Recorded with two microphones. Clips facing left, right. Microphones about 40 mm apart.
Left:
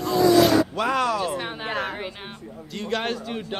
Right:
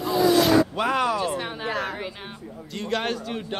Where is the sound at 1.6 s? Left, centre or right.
Left.